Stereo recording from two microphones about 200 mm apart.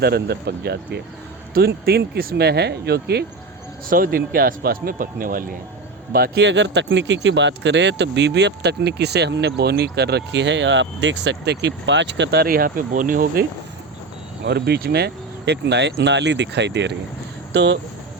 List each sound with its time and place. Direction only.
0.0 s speech: 55° right (ahead or behind)
14.4 s speech: 55° right (ahead or behind)